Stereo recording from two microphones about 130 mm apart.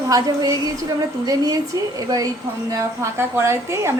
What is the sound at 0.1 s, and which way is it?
A woman's voice, 25° right (ahead or behind).